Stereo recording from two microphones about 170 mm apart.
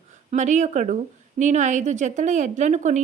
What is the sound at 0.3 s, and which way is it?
Speech, 45° right (ahead or behind).